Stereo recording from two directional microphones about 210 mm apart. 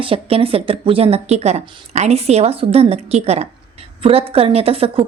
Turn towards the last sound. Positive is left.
turn(degrees=-25)  # may be behind; listen again after turning